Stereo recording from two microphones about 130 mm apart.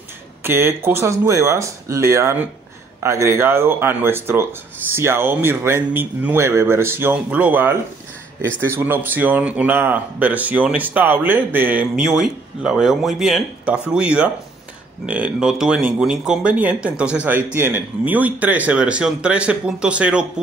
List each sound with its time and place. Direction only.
0.4 s speech: 15° right (ahead or behind)